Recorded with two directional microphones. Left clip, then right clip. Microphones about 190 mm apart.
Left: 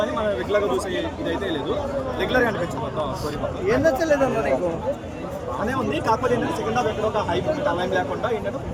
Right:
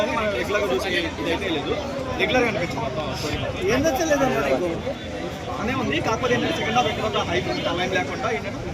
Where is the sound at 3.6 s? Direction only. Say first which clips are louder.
Left 2 dB; 45° left (ahead or behind).